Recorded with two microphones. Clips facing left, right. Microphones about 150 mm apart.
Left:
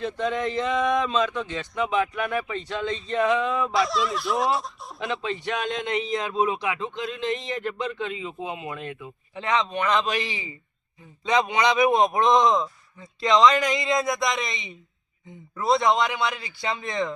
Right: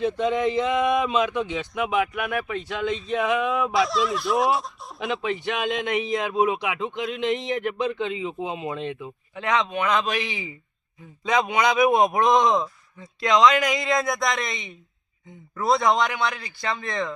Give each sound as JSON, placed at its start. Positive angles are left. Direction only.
{"t": 0.0, "sound": "speech", "side_deg": -15}
{"t": 3.7, "sound": "a man's voice", "side_deg": 0}
{"t": 5.0, "sound": "speech", "side_deg": -20}
{"t": 9.3, "sound": "a man's voice", "side_deg": 0}